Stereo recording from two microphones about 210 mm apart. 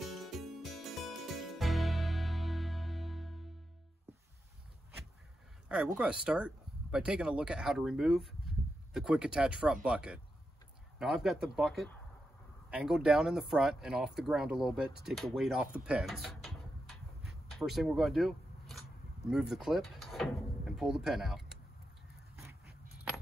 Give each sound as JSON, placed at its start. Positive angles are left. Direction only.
{"t": 0.0, "sound": "music", "side_deg": 0}
{"t": 5.9, "sound": "speech", "side_deg": -5}
{"t": 15.0, "sound": "a sound", "side_deg": 0}